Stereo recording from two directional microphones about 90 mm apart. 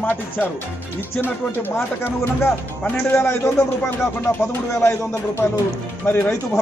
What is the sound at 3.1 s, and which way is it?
Speech, 30° left (ahead or behind).